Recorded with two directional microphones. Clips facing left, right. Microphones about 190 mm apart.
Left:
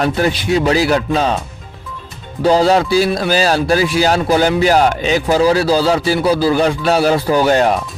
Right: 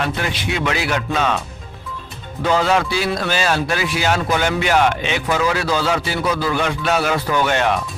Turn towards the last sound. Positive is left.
turn(degrees=35)  # may be behind; listen again after turning